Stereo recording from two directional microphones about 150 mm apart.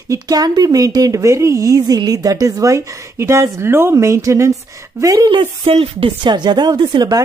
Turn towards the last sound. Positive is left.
turn(degrees=-25)  # may be behind; listen again after turning